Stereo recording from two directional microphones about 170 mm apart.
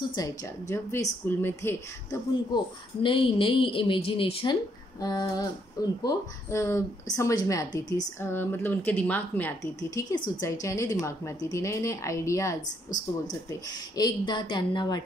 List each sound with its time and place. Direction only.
0.1 s a woman's voice: 20° left (ahead or behind)
2.5 s a woman's voice: 30° left (ahead or behind)